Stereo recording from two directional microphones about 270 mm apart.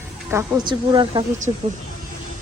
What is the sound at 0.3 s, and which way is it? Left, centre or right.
Speech, centre.